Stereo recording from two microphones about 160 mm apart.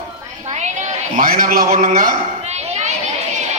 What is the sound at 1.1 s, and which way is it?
Speech, 60° right (ahead or behind).